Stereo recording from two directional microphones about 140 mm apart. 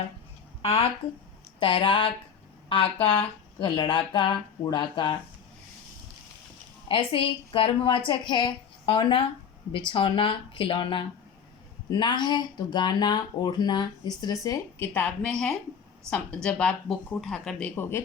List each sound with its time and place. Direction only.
0.6 s a woman's voice: 45° left (ahead or behind)
6.8 s speech: 40° left (ahead or behind); by 18.0 s 10° left (ahead or behind)